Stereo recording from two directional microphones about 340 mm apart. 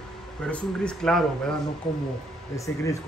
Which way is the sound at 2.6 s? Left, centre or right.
Centre.